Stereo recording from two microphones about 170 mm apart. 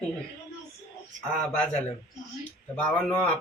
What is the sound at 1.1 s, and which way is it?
Speech, 50° right (ahead or behind).